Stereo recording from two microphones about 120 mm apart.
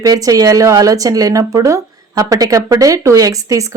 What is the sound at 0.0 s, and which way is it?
Speech, 30° right (ahead or behind).